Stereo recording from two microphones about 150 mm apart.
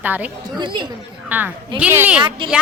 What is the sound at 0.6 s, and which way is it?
Speech, 30° right (ahead or behind).